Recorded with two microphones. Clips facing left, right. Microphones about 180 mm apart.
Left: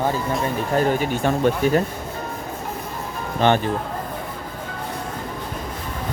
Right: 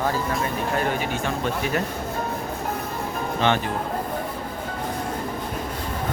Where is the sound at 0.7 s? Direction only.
40° left (ahead or behind).